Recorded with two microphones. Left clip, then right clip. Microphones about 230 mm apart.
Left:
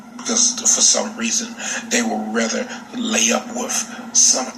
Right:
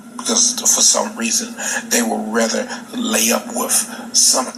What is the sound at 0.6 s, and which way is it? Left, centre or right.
A man's voice, right.